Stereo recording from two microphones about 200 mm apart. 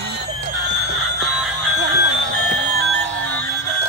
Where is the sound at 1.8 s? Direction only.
55° right (ahead or behind).